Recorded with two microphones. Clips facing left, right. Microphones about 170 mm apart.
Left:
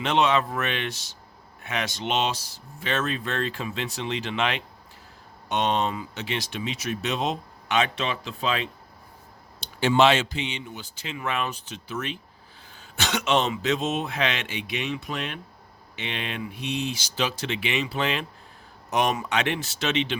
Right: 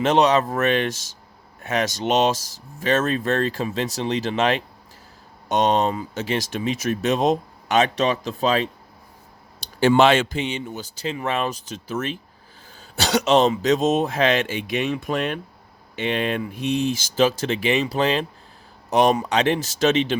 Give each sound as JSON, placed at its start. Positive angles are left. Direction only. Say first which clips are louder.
{"t": 0.0, "sound": "speech", "louder": "right 5 dB", "side_deg": -40}
{"t": 9.8, "sound": "speech", "louder": "right 4 dB", "side_deg": -50}